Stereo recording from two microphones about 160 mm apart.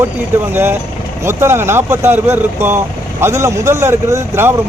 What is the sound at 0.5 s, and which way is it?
Speech, 15° right (ahead or behind).